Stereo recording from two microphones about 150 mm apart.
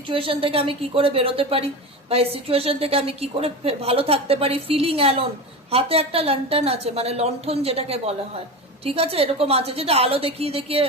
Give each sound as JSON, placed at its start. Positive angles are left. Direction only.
{"t": 0.1, "sound": "a woman's voice", "side_deg": -35}